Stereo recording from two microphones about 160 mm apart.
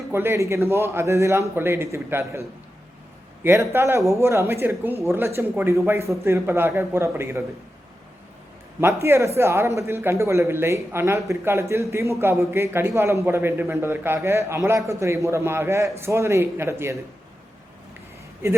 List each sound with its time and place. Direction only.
0.1 s a man's voice: 15° right (ahead or behind)
3.4 s a man's voice: 15° right (ahead or behind)
8.8 s a man's voice: 15° right (ahead or behind)
18.4 s a man's voice: 15° right (ahead or behind)